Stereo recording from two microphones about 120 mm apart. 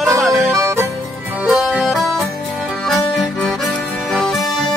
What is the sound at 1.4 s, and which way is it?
Music, 10° right (ahead or behind).